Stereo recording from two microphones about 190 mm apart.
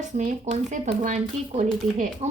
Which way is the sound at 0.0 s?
40° right (ahead or behind).